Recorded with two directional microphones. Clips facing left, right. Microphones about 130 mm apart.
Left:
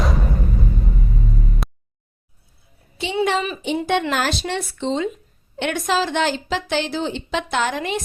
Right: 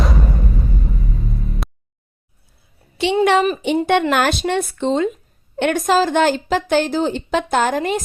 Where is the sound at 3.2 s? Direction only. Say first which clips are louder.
Right 5 dB; 65° right (ahead or behind).